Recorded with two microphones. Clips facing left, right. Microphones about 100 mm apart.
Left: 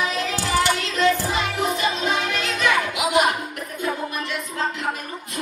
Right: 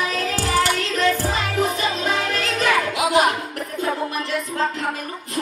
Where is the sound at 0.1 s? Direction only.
40° right (ahead or behind).